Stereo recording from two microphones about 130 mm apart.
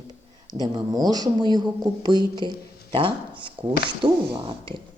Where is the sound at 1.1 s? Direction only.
35° right (ahead or behind).